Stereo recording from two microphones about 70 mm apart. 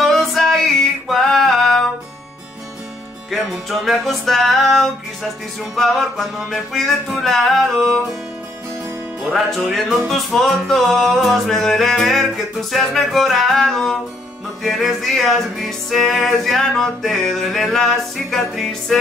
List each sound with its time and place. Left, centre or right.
0.0 s music: centre
3.3 s music: centre
9.2 s music: centre